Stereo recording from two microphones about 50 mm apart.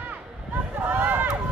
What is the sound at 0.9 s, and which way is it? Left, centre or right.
Run, right.